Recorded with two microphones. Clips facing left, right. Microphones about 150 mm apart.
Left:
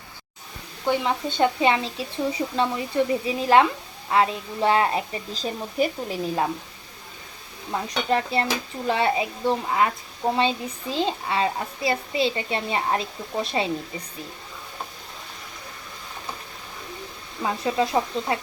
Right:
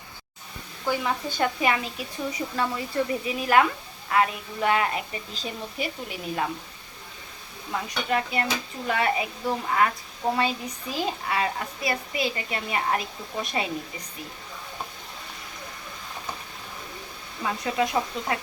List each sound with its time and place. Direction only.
0.9 s a woman's voice: 25° left (ahead or behind)
7.7 s a woman's voice: 30° left (ahead or behind)
17.4 s speech: 30° left (ahead or behind)